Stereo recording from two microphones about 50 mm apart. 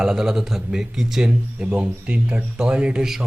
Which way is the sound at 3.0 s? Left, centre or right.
Centre.